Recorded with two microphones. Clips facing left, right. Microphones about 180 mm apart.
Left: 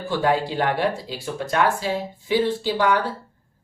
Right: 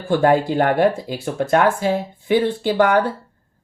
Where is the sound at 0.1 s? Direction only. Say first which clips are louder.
Right 6 dB; 55° right (ahead or behind).